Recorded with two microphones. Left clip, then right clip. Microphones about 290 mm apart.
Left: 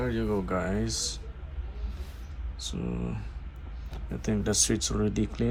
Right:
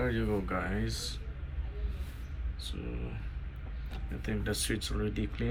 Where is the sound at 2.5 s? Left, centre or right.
Left.